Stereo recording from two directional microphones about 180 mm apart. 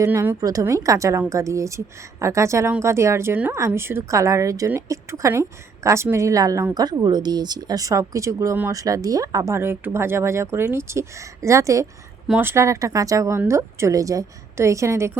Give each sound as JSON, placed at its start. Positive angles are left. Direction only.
{"t": 0.0, "sound": "a woman's voice", "side_deg": -15}